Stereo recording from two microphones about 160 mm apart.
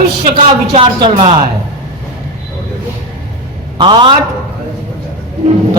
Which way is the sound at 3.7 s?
30° right (ahead or behind).